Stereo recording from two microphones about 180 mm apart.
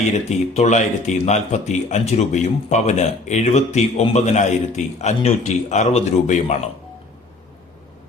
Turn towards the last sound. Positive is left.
turn(degrees=40)  # may be behind; listen again after turning